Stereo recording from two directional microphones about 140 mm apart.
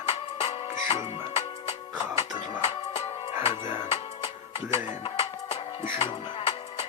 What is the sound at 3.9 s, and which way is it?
Music, 45° left (ahead or behind).